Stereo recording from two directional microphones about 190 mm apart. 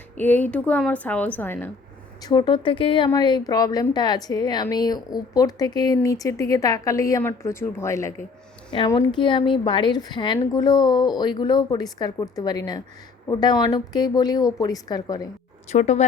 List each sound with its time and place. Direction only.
0.2 s a woman's voice: 10° left (ahead or behind)
2.2 s speech: 20° left (ahead or behind)
15.7 s speech: 35° left (ahead or behind)